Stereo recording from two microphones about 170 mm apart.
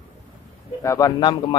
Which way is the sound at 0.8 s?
20° left (ahead or behind).